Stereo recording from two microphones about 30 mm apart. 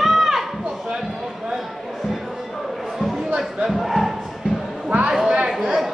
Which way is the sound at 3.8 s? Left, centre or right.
Centre.